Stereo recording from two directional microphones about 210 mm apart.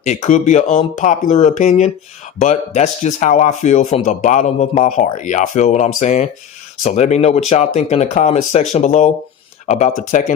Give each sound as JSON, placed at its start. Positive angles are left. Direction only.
{"t": 0.0, "sound": "a man's voice", "side_deg": 35}